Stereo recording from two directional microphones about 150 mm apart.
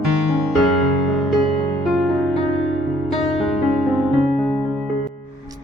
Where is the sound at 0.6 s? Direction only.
Centre (ahead or behind).